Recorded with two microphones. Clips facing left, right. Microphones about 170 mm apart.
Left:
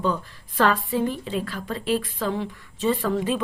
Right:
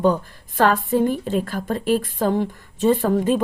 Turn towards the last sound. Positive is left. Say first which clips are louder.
# right 5 dB
turn(degrees=-45)  # may be behind; listen again after turning